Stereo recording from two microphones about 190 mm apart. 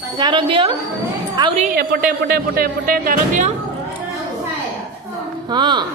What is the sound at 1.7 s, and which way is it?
Speech, 50° right (ahead or behind).